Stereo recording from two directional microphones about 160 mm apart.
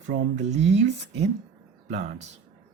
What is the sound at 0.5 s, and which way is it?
Speech, 40° right (ahead or behind).